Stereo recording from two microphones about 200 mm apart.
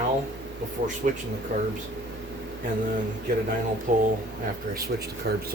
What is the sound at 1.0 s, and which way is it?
Speech, 40° right (ahead or behind).